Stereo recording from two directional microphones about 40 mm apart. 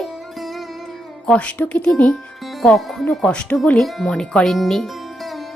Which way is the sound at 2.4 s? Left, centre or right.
Centre.